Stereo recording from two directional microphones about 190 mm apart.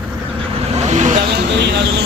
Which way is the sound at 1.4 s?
65° right (ahead or behind).